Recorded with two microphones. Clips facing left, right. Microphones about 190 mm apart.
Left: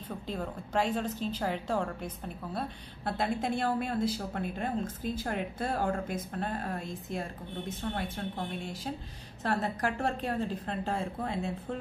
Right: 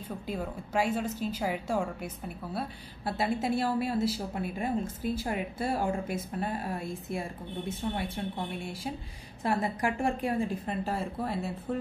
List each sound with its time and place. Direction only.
0.3 s a woman's voice: 10° right (ahead or behind)